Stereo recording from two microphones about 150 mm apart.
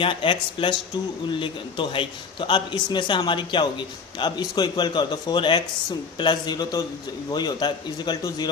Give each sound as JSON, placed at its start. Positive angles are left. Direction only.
{"t": 0.0, "sound": "a man's voice", "side_deg": 35}